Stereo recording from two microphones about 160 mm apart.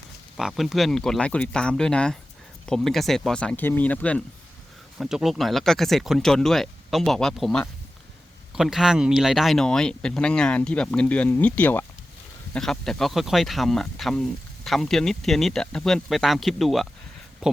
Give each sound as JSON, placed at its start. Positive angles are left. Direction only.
{"t": 0.3, "sound": "speech", "side_deg": 0}
{"t": 4.9, "sound": "speech", "side_deg": -5}